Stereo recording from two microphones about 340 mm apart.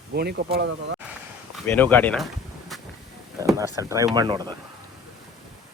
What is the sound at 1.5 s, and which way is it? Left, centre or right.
Speech, centre.